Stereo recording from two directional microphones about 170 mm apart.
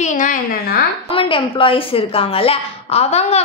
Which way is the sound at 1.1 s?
30° left (ahead or behind).